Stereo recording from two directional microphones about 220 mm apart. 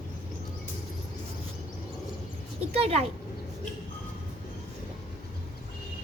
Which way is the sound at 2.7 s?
30° right (ahead or behind).